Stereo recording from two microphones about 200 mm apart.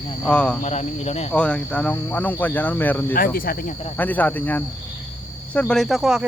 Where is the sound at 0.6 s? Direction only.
35° left (ahead or behind).